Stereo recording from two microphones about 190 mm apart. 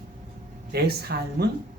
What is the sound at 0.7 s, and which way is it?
Speech, 60° right (ahead or behind).